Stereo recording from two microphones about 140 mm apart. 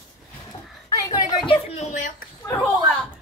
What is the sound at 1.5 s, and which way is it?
Speech, 45° left (ahead or behind).